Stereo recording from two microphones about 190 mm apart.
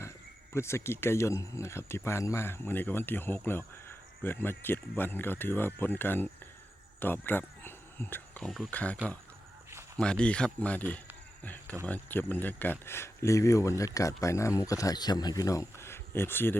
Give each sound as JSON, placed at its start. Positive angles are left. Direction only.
{"t": 0.5, "sound": "speech", "side_deg": 15}
{"t": 10.0, "sound": "speech", "side_deg": 5}